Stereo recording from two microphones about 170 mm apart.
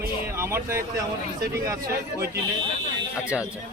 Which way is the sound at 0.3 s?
15° right (ahead or behind).